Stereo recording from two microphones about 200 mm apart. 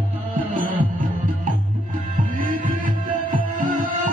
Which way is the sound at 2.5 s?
45° right (ahead or behind).